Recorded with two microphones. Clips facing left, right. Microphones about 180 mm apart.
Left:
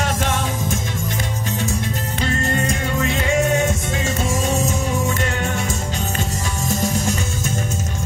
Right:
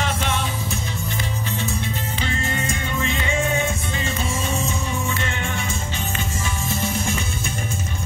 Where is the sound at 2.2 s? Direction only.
40° left (ahead or behind).